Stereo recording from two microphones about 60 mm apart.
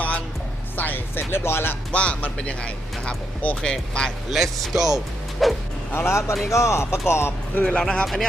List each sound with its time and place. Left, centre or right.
0.8 s speech: left
1.9 s speech: left
4.3 s speech: centre
5.9 s speech: left
7.6 s speech: centre
8.0 s speech: centre